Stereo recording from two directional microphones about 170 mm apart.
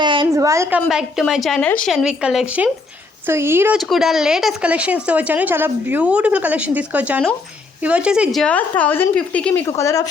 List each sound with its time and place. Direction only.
0.0 s a sound: 25° right (ahead or behind)
0.9 s a woman's voice: 5° right (ahead or behind)
3.8 s a woman's voice: centre (ahead or behind); by 10.1 s 20° left (ahead or behind)